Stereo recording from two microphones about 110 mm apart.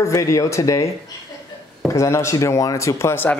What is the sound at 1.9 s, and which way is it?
A man's voice, 25° left (ahead or behind).